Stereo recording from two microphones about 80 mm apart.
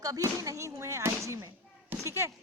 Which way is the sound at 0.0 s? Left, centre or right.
Right.